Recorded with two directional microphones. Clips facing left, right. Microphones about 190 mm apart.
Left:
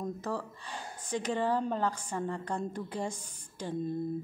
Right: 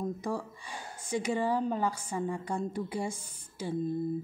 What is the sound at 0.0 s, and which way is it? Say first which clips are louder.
A woman's voice: right 2 dB; 10° right (ahead or behind).